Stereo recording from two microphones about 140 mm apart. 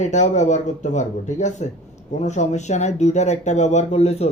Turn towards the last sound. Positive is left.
turn(degrees=50)  # may be behind; listen again after turning